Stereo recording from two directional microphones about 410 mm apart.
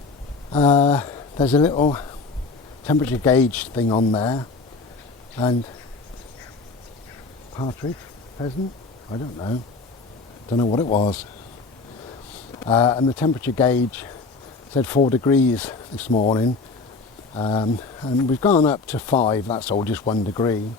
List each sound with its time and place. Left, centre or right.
0.5 s speech: centre
7.5 s speech: centre
10.5 s speech: centre
12.5 s speech: centre
16.0 s speech: centre
18.9 s speech: centre